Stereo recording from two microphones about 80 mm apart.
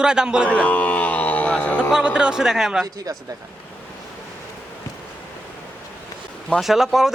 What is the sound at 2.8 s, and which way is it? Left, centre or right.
Speech, right.